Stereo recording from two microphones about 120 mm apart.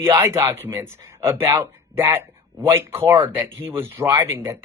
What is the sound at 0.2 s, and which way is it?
Speech, 25° right (ahead or behind).